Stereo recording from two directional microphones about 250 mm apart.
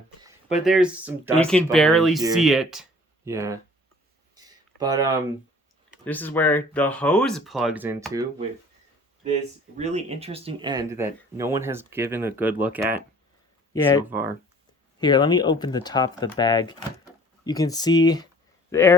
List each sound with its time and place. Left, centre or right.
0.6 s speech: centre
1.4 s speech: centre
4.4 s a sound: centre
6.1 s speech: centre
9.2 s speech: right; by 13.0 s centre
13.7 s speech: centre
14.1 s speech: centre
14.9 s speech: centre